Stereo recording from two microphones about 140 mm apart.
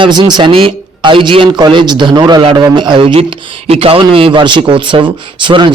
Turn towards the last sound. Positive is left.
turn(degrees=-35)  # may be behind; listen again after turning